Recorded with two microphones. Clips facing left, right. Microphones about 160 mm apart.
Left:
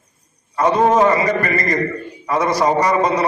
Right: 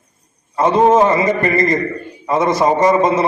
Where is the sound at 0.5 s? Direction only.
25° right (ahead or behind).